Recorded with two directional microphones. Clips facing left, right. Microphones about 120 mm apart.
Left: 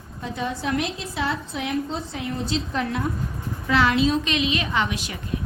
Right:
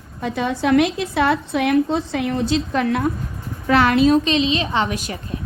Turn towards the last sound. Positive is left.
turn(degrees=-45)  # may be behind; listen again after turning